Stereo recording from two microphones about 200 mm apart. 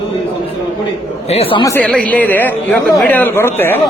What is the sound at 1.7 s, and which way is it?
A man's voice, 5° left (ahead or behind).